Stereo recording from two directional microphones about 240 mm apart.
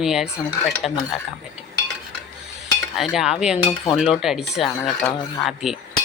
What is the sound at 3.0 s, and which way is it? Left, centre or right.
A woman's voice, centre.